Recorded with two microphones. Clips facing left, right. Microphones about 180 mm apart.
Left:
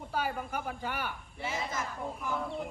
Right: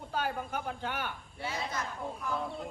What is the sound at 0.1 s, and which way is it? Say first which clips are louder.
A man's voice: even; 5° left (ahead or behind).